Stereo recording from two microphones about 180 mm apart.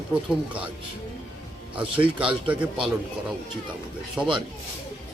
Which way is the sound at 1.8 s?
30° right (ahead or behind).